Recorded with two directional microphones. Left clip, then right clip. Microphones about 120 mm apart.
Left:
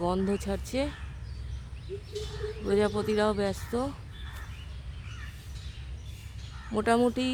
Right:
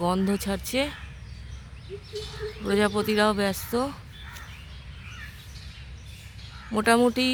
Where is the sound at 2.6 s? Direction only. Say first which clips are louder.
Right 3 dB; 30° right (ahead or behind).